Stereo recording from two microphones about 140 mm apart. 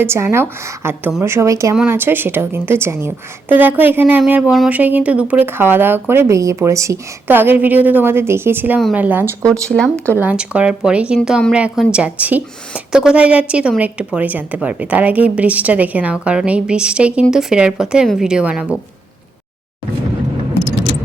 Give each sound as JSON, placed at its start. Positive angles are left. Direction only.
{"t": 0.0, "sound": "a woman's voice", "side_deg": -20}
{"t": 9.5, "sound": "speech", "side_deg": 5}
{"t": 10.2, "sound": "a woman's voice", "side_deg": -10}